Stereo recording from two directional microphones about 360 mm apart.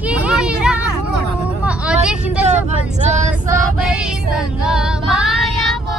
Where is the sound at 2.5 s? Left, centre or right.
Centre.